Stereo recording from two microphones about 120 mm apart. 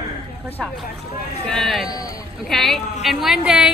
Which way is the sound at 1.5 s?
Centre (ahead or behind).